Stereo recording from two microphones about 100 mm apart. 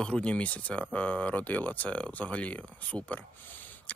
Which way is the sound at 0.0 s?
10° left (ahead or behind).